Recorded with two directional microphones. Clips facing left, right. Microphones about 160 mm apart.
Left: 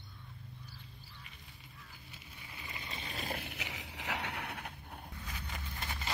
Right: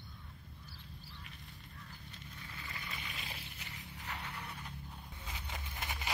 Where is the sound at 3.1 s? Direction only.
45° left (ahead or behind).